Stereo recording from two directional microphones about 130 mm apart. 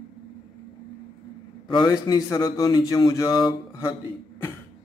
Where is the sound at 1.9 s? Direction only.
25° left (ahead or behind).